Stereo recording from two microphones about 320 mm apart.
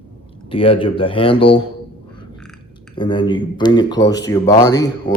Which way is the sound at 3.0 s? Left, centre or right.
Centre.